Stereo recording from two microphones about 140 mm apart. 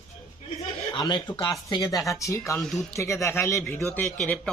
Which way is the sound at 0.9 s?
30° left (ahead or behind).